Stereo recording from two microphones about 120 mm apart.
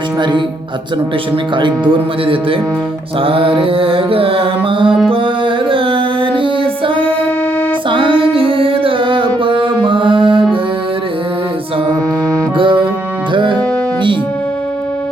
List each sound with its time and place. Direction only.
0.2 s speech: 40° right (ahead or behind)
1.5 s mantra: 45° right (ahead or behind)
5.0 s music: 45° right (ahead or behind)
12.5 s music: 45° right (ahead or behind)